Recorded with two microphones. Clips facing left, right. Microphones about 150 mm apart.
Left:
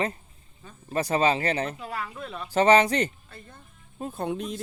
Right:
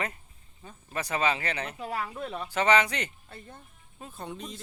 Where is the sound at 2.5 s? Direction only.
35° left (ahead or behind).